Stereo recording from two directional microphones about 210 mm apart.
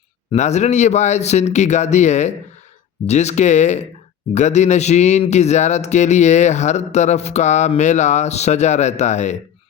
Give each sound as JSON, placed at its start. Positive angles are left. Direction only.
{"t": 0.3, "sound": "a man's voice", "side_deg": 35}